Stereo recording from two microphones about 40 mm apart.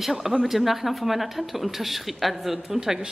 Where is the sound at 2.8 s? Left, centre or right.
Centre.